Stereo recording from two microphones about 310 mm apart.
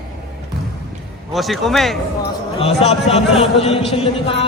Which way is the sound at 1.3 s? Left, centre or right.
Centre.